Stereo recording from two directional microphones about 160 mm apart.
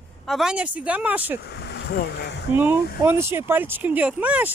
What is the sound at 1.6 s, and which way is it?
Speech, 90° left.